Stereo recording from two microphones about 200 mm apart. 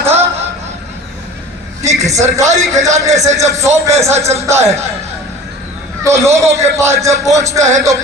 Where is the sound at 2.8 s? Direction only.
35° right (ahead or behind).